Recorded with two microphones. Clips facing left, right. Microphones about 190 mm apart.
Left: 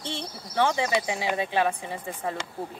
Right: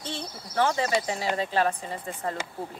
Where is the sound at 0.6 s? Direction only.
15° left (ahead or behind).